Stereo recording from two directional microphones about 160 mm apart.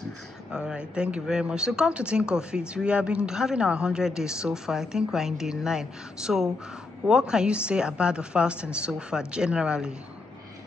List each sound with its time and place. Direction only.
0.5 s speech: 5° right (ahead or behind)